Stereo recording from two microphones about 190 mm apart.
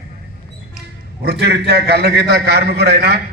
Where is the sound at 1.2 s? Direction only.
60° right (ahead or behind).